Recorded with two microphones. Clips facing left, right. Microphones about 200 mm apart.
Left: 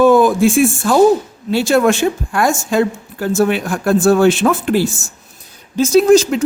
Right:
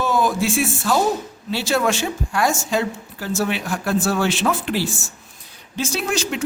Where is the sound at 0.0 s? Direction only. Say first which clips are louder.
Left 10 dB; 50° left (ahead or behind).